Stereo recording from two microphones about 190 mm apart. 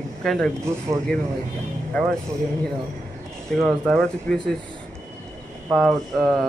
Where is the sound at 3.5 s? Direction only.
Centre (ahead or behind).